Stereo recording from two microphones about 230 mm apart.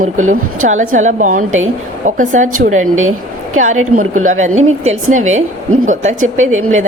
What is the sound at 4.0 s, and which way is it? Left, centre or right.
Speech, right.